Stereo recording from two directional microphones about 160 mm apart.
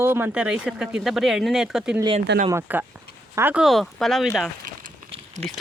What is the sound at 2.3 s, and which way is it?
Speech, 90° right.